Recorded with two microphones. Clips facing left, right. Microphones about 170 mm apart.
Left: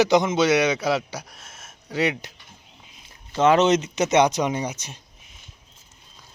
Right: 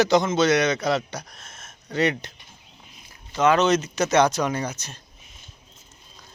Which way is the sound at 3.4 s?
25° left (ahead or behind).